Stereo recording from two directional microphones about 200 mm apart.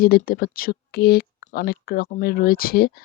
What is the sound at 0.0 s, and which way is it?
Speech, 50° left (ahead or behind).